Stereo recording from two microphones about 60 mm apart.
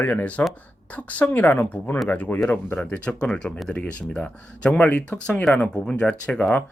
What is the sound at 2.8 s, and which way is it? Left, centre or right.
Speech, left.